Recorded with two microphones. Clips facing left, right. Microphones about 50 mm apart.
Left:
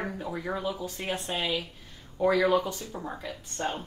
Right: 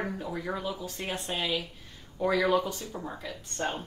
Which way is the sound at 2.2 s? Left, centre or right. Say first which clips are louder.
Left 2 dB; centre.